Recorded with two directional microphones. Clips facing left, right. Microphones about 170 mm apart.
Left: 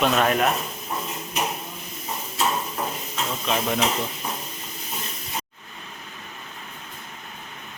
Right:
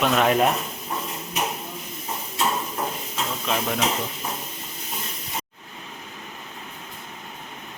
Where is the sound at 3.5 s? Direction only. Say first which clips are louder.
Left 2 dB; 5° left (ahead or behind).